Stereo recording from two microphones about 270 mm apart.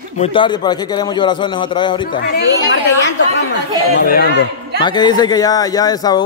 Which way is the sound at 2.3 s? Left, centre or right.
Left.